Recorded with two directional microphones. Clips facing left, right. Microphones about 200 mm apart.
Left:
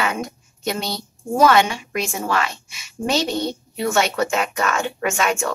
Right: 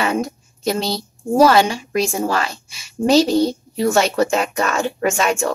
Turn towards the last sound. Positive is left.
turn(degrees=-30)  # may be behind; listen again after turning